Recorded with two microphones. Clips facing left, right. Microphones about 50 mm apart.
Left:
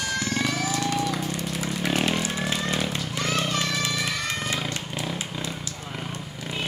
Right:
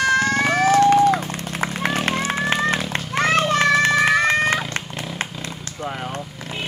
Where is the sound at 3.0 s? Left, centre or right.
Right.